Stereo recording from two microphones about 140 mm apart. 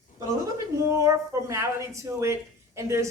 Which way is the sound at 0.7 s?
20° right (ahead or behind).